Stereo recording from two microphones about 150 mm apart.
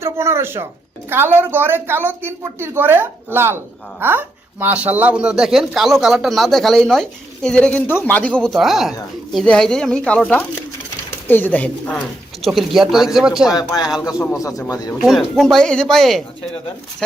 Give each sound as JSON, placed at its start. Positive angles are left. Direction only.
{"t": 0.0, "sound": "speech", "side_deg": -20}
{"t": 12.4, "sound": "speech", "side_deg": 0}
{"t": 13.5, "sound": "speech", "side_deg": 25}
{"t": 14.9, "sound": "speech", "side_deg": 0}